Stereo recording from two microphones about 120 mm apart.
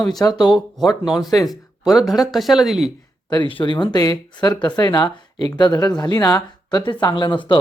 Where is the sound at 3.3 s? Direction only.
45° left (ahead or behind).